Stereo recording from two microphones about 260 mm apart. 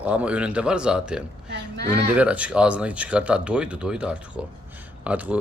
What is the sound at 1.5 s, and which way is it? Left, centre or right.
Speech, right.